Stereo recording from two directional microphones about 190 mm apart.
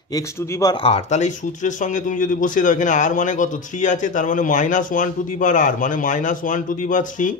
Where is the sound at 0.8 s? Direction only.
35° left (ahead or behind).